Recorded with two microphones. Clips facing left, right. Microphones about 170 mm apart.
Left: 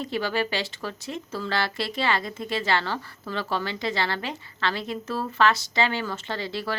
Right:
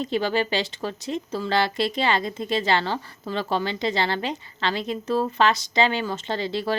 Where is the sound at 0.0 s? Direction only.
20° right (ahead or behind).